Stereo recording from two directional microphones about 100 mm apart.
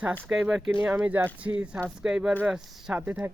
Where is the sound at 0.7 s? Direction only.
15° right (ahead or behind).